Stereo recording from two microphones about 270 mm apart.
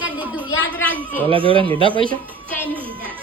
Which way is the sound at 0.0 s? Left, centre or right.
Centre.